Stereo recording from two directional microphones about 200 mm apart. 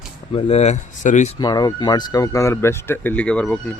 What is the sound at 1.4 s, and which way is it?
Speech, 20° left (ahead or behind).